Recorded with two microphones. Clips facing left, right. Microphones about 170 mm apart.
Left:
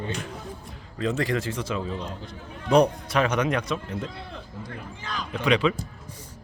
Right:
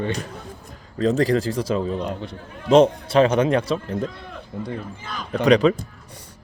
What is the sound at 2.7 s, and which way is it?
A man's voice, 25° right (ahead or behind).